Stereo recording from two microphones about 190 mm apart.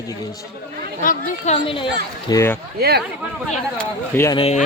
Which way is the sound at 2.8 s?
55° right (ahead or behind).